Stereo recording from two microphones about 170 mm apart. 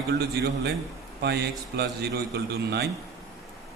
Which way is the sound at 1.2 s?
75° right (ahead or behind).